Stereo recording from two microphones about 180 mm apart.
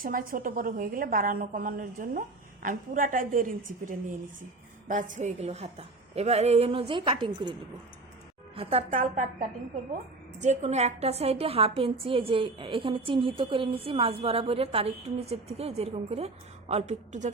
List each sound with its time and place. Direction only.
0.0 s a woman's voice: 50° right (ahead or behind); by 7.5 s 25° right (ahead or behind)
8.5 s a woman's voice: 40° right (ahead or behind)